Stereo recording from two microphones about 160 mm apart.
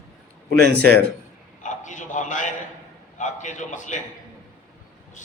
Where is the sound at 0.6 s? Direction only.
85° right.